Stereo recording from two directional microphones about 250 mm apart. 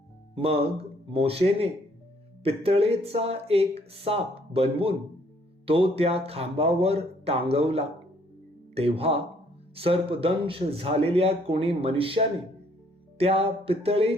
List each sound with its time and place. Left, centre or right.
0.3 s speech: right